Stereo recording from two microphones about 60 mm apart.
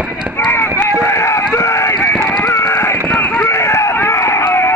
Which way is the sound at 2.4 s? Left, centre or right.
Left.